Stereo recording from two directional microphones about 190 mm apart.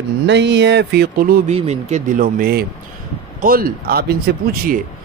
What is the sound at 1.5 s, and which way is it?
Speech, 35° right (ahead or behind).